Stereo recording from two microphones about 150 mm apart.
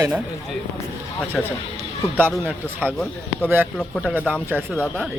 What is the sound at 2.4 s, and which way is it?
A man's voice, 15° right (ahead or behind).